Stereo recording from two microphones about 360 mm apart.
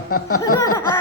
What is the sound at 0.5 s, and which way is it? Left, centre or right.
Speech, centre.